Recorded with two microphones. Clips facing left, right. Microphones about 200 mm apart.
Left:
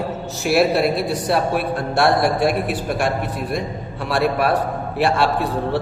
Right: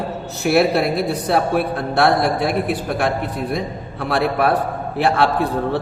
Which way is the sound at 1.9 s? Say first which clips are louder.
Even; 55° right (ahead or behind).